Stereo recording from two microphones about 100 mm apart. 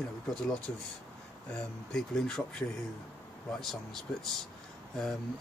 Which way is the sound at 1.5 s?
5° left (ahead or behind).